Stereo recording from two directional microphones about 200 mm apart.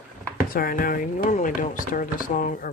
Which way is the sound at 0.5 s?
45° left (ahead or behind).